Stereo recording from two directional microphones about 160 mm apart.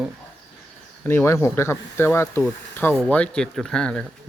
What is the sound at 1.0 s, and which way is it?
Speech, 15° left (ahead or behind).